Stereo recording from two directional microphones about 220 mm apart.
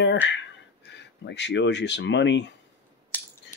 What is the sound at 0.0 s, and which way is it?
Speech, 55° left (ahead or behind).